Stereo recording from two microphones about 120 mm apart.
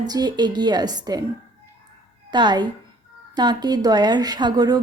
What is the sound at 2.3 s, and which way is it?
A woman's voice, 40° right (ahead or behind).